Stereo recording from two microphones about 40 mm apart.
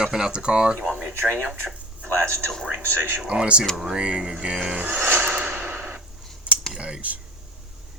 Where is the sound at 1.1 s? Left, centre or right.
Right.